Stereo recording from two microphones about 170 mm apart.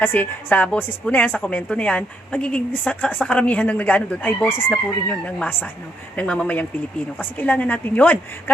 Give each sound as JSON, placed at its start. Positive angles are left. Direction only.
{"t": 0.0, "sound": "a woman's voice", "side_deg": 10}